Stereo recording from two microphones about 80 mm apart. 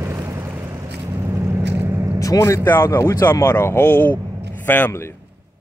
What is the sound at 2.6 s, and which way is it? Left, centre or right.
Speech, left.